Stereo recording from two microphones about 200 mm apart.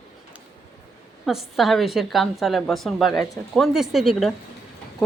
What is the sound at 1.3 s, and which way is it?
A woman's voice, centre (ahead or behind).